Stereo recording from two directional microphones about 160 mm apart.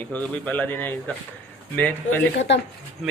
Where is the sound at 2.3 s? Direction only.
90° left.